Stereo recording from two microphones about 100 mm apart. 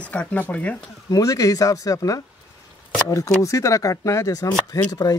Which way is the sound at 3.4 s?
35° left (ahead or behind).